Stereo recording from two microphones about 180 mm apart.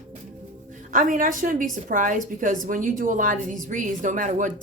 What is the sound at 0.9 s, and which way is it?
A woman's voice, 45° right (ahead or behind).